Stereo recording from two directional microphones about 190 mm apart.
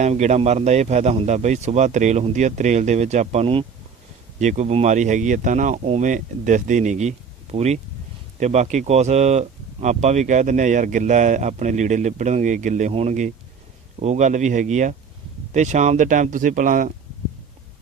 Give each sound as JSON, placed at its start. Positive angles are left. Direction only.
{"t": 0.0, "sound": "speech", "side_deg": -35}